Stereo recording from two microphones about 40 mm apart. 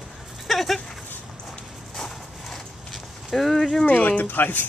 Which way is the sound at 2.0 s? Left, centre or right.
Centre.